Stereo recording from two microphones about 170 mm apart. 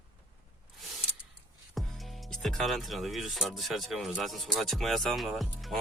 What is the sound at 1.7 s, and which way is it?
Speech, centre (ahead or behind).